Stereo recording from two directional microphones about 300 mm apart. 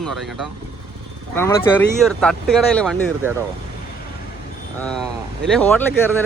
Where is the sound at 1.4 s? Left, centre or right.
Centre.